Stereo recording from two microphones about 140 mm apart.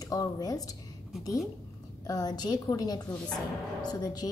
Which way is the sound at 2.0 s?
25° left (ahead or behind).